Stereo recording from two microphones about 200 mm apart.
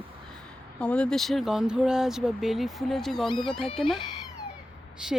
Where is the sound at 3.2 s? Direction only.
25° left (ahead or behind).